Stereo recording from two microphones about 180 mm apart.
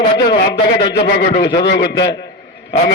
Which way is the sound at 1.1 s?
70° left (ahead or behind).